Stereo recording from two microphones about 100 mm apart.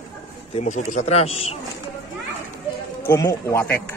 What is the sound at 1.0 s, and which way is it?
Speech, 90° left.